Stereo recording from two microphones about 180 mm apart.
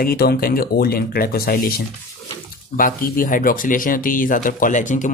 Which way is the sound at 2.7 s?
50° left (ahead or behind).